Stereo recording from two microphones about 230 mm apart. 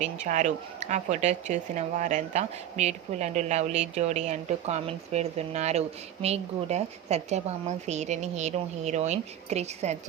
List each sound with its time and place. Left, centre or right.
0.0 s a woman's voice: right